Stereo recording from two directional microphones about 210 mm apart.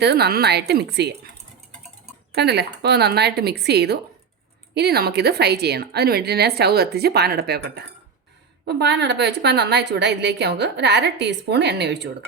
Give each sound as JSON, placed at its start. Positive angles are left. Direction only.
{"t": 0.0, "sound": "a woman's voice", "side_deg": -50}
{"t": 2.3, "sound": "a woman's voice", "side_deg": -50}